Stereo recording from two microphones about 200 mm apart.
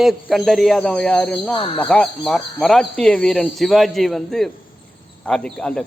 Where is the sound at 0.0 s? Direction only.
Centre (ahead or behind).